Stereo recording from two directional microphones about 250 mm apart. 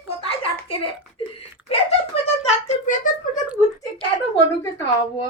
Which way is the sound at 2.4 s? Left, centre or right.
Left.